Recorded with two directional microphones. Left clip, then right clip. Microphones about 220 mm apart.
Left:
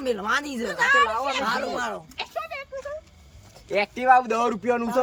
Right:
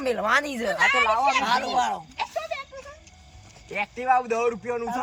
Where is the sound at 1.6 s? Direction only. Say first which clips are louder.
Right 4 dB; 5° right (ahead or behind).